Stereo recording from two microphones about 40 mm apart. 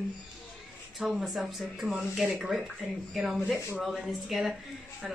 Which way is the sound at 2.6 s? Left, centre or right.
Centre.